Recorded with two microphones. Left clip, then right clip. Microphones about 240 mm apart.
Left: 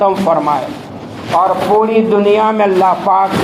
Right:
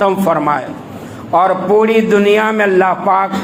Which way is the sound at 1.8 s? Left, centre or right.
Right.